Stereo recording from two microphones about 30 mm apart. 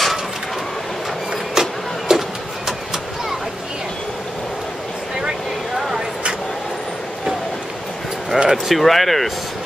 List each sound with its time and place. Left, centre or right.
1.5 s vehicle: centre
8.3 s a sound: centre
8.7 s speech: centre